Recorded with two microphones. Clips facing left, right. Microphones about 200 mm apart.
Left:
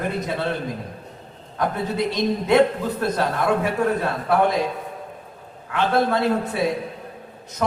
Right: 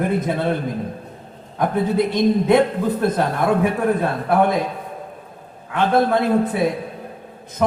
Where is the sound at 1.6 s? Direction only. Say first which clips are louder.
Right 5 dB; 55° right (ahead or behind).